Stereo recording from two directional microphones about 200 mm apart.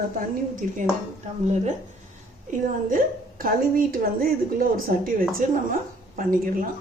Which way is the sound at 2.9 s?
45° right (ahead or behind).